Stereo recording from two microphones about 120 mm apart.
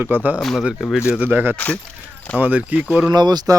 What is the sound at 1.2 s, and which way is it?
Speech, 15° right (ahead or behind).